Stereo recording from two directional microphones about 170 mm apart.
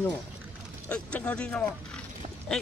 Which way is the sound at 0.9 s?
5° left (ahead or behind).